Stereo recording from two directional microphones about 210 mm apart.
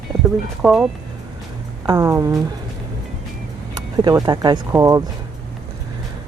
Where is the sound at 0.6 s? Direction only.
Centre (ahead or behind).